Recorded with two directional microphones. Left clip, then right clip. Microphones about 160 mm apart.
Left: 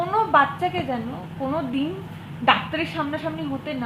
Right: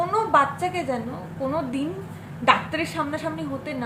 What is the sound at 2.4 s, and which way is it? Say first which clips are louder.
A woman's voice: even; 15° right (ahead or behind).